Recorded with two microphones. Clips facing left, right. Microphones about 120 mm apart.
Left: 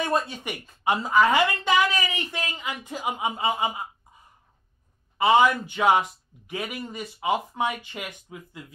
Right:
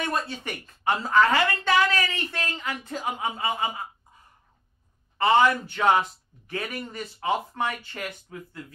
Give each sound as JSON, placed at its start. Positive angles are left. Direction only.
{"t": 0.0, "sound": "a man's voice", "side_deg": 20}
{"t": 5.1, "sound": "a man's voice", "side_deg": 10}